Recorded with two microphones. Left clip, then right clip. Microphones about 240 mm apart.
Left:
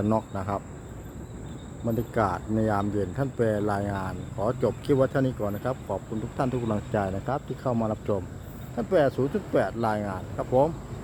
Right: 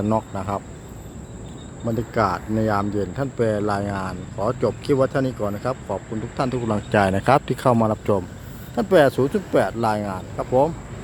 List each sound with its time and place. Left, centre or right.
0.1 s speech: centre
1.9 s speech: centre